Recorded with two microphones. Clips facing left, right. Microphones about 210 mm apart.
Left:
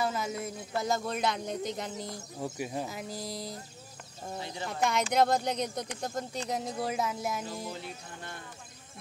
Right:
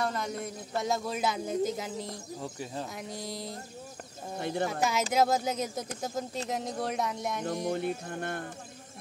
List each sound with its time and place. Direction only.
0.0 s speech: 5° left (ahead or behind)
2.4 s speech: 15° left (ahead or behind)
2.9 s speech: centre (ahead or behind)
4.4 s music: 55° right (ahead or behind)
4.6 s speech: 5° right (ahead or behind)
7.4 s music: 50° right (ahead or behind)